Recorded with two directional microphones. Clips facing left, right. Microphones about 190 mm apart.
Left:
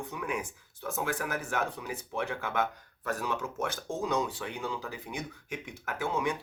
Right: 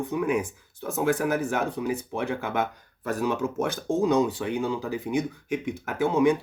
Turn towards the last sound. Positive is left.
turn(degrees=-20)  # may be behind; listen again after turning